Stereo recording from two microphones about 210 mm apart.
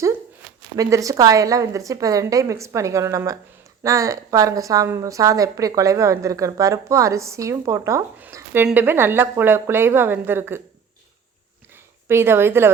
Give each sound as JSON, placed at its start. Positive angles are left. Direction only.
{"t": 0.8, "sound": "a woman's voice", "side_deg": -15}
{"t": 12.0, "sound": "a woman's voice", "side_deg": -10}